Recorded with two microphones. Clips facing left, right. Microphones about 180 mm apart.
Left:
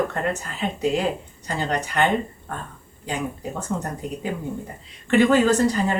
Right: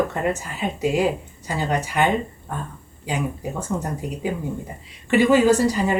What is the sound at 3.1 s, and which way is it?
Speech, 10° right (ahead or behind).